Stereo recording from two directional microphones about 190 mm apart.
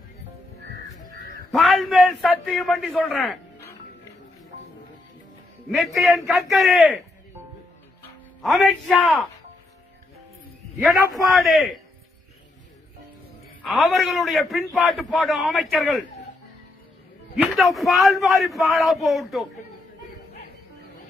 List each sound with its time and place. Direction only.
1.5 s a man's voice: centre (ahead or behind)
5.7 s a man's voice: centre (ahead or behind)
8.4 s a man's voice: centre (ahead or behind)
11.3 s a man's voice: centre (ahead or behind)
13.6 s a man's voice: centre (ahead or behind)
17.6 s a man's voice: centre (ahead or behind)